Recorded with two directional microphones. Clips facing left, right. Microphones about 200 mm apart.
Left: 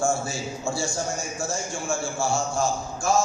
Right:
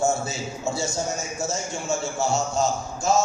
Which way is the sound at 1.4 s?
20° right (ahead or behind).